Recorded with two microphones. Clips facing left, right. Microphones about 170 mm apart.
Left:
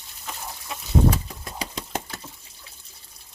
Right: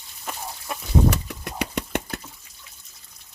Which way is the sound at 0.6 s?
65° right (ahead or behind).